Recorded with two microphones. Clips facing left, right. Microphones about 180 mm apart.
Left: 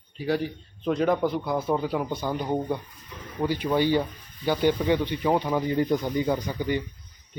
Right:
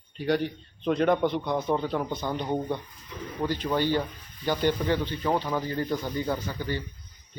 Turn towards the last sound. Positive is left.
turn(degrees=15)  # may be behind; listen again after turning